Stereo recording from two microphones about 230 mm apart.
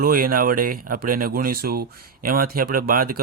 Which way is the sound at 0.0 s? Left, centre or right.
Right.